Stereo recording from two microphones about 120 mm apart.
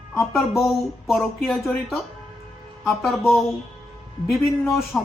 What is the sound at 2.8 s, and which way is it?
Speech, centre (ahead or behind).